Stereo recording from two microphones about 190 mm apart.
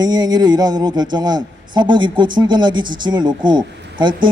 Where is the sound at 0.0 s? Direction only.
20° right (ahead or behind).